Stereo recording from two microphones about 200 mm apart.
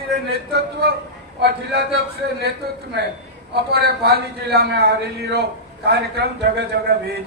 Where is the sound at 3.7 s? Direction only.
55° right (ahead or behind).